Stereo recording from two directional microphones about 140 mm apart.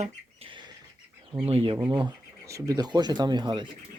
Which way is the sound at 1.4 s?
45° right (ahead or behind).